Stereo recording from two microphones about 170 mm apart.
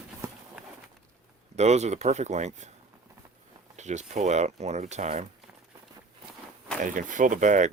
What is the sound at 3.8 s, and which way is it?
Speech, 45° right (ahead or behind).